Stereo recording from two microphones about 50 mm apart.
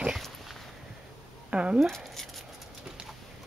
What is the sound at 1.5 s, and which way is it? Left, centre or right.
Shuffling cards, right.